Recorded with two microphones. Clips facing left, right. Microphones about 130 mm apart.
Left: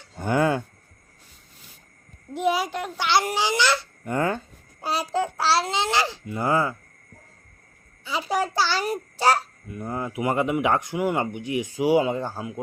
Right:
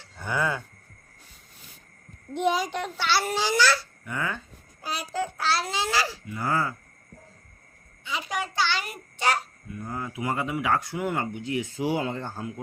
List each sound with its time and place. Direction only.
0.2 s speech: 45° left (ahead or behind)
2.3 s a child's voice: 5° left (ahead or behind)
3.1 s speech: 15° left (ahead or behind)
4.0 s a child's voice: 40° left (ahead or behind); by 6.7 s 20° left (ahead or behind)
8.3 s a child's voice: 35° left (ahead or behind)
9.7 s a child's voice: 25° left (ahead or behind)